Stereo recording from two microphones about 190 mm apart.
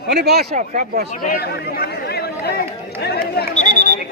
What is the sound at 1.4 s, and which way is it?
Speech, 55° left (ahead or behind).